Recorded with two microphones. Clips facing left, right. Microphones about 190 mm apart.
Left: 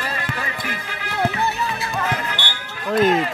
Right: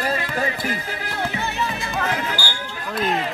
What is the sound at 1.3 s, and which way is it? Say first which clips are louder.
Music: left 3 dB; 35° left (ahead or behind).